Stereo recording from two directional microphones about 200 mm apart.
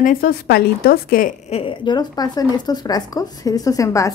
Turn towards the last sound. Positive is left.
turn(degrees=15)  # may be behind; listen again after turning